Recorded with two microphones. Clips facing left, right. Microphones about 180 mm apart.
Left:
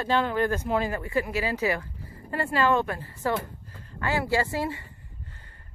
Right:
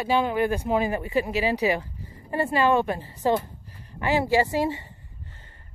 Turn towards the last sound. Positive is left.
turn(degrees=-20)  # may be behind; listen again after turning